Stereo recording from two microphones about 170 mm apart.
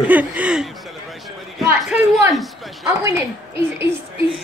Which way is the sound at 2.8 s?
15° right (ahead or behind).